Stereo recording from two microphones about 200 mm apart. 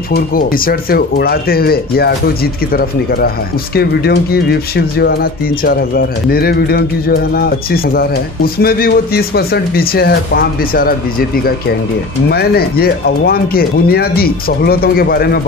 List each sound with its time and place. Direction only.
0.1 s speech: 45° left (ahead or behind)